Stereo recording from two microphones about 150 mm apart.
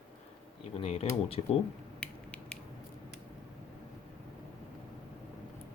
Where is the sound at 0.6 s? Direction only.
40° left (ahead or behind).